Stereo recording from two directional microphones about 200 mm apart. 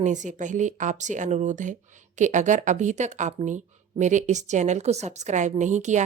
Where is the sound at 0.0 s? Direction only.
35° right (ahead or behind).